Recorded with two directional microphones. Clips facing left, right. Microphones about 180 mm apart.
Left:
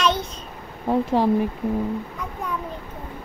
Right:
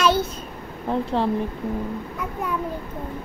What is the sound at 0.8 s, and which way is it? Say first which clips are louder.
Speech: left 3 dB; 10° left (ahead or behind).